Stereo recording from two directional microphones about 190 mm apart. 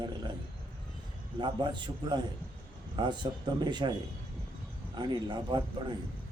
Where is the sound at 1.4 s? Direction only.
25° right (ahead or behind).